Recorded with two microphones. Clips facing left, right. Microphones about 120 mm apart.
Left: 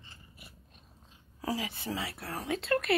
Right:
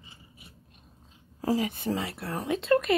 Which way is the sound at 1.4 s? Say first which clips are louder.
Right 7 dB; 45° right (ahead or behind).